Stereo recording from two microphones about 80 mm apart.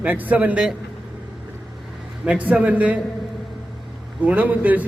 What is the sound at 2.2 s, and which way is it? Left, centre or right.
Speech, centre.